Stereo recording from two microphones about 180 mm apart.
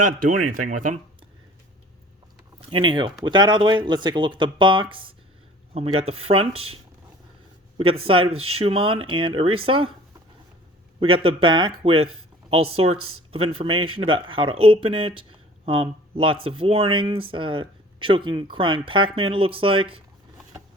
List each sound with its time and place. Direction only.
0.0 s speech: 45° right (ahead or behind)
2.6 s speech: 30° right (ahead or behind)
7.8 s speech: 30° right (ahead or behind)
11.0 s speech: 30° right (ahead or behind)